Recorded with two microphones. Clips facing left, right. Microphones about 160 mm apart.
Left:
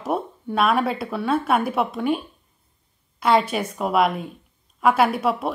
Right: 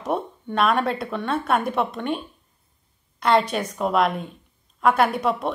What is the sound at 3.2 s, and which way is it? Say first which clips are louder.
A woman's voice: left 1 dB; 5° left (ahead or behind).